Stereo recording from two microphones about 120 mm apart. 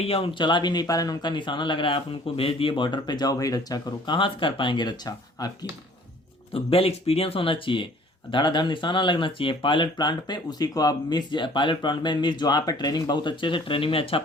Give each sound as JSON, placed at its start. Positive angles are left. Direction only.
{"t": 0.0, "sound": "speech", "side_deg": 55}
{"t": 6.5, "sound": "speech", "side_deg": 50}